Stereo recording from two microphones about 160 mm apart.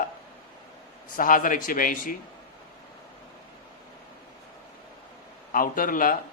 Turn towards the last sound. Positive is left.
turn(degrees=60)  # may be behind; listen again after turning